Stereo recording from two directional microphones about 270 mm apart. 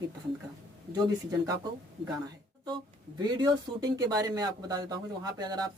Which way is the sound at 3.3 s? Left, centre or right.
Centre.